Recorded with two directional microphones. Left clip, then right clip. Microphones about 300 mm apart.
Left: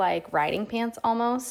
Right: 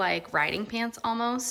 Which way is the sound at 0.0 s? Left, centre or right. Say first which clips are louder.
Left 2 dB; centre.